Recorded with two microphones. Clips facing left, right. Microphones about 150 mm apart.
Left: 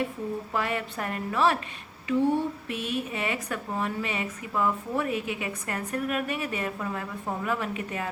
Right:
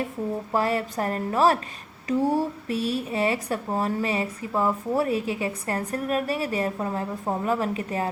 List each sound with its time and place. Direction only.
0.5 s a woman's voice: 35° right (ahead or behind)